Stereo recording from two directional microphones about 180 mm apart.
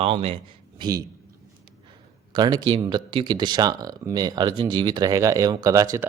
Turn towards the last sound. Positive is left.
turn(degrees=-20)  # may be behind; listen again after turning